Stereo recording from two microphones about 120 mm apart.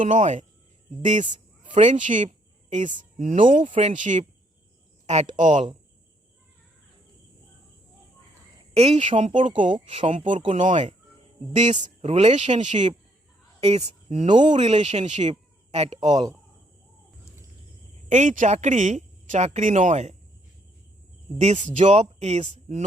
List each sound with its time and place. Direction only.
0.0 s speech: 85° right
5.0 s speech: 70° right (ahead or behind); by 5.7 s 90° right
8.7 s speech: 60° right (ahead or behind)
9.6 s speech: 45° right (ahead or behind)
10.1 s speech: 90° right
11.5 s speech: 80° right
12.0 s speech: 65° right (ahead or behind)
13.6 s speech: 65° right (ahead or behind)
14.3 s speech: 40° right (ahead or behind)
14.6 s speech: 65° right (ahead or behind)
16.0 s speech: 35° right (ahead or behind)
18.1 s speech: 90° right; by 20.1 s 70° right (ahead or behind)
21.3 s speech: 75° right (ahead or behind)